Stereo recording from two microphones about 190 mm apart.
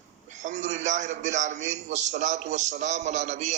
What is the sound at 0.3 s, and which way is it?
A man's voice, 40° right (ahead or behind).